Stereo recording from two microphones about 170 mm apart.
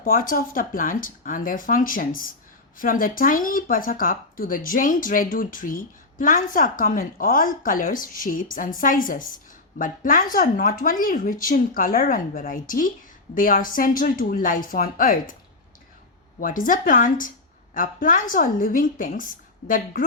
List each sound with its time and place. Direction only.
0.0 s speech: 55° left (ahead or behind)
16.4 s speech: 55° left (ahead or behind)